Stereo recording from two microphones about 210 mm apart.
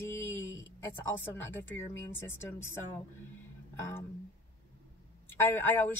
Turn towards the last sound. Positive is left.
turn(degrees=10)  # may be behind; listen again after turning